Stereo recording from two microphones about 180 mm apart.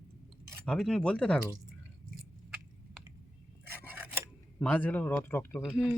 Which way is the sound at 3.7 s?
10° right (ahead or behind).